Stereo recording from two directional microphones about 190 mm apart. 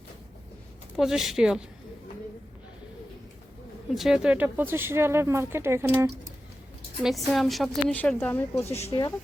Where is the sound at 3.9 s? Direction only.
Centre (ahead or behind).